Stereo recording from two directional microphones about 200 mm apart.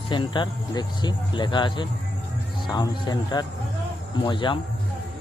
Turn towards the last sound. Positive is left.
turn(degrees=25)  # may be behind; listen again after turning